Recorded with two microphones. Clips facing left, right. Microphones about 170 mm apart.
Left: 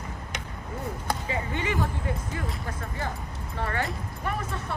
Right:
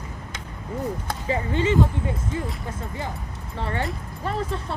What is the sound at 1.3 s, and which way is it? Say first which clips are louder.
Speech: right 10 dB; 25° right (ahead or behind).